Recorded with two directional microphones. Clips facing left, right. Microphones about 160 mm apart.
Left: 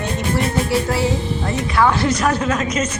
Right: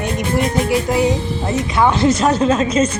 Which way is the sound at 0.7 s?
15° right (ahead or behind).